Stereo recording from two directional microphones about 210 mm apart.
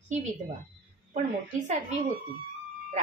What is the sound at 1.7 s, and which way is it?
Speech, 35° right (ahead or behind).